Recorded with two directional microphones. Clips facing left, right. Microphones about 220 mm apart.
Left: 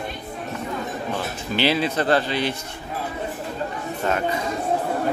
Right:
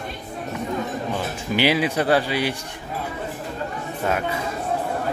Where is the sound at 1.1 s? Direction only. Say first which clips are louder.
Right 1 dB; 10° right (ahead or behind).